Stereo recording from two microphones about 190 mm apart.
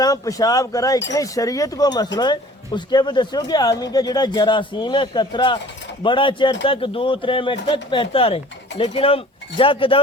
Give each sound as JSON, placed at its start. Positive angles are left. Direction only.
{"t": 0.0, "sound": "speech", "side_deg": 20}